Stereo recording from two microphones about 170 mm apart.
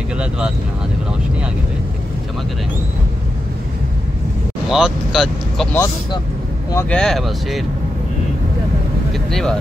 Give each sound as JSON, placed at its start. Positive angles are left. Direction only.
{"t": 4.6, "sound": "speech", "side_deg": 0}
{"t": 6.7, "sound": "speech", "side_deg": 15}
{"t": 7.0, "sound": "speech", "side_deg": 0}
{"t": 9.3, "sound": "speech", "side_deg": 0}